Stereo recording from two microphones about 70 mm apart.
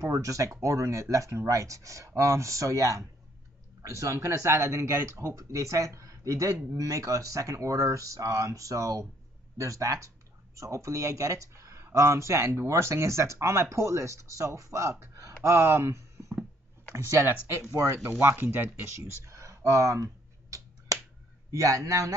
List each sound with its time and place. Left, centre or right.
0.2 s speech: right
18.2 s a sound: right
21.5 s speech: right